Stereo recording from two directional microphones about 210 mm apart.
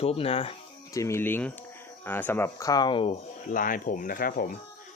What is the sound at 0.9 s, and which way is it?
Speech, 15° left (ahead or behind).